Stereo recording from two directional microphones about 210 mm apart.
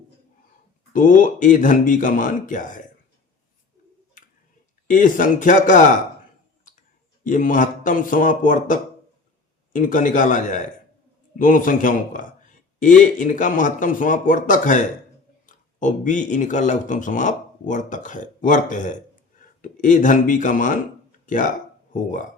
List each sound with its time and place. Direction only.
0.9 s speech: 40° left (ahead or behind)
4.9 s speech: 40° left (ahead or behind)
7.3 s speech: 40° left (ahead or behind)